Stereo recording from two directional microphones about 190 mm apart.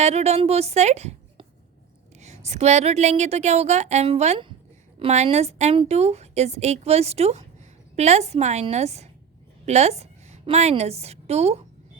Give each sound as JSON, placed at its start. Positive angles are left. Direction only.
{"t": 0.0, "sound": "a woman's voice", "side_deg": -35}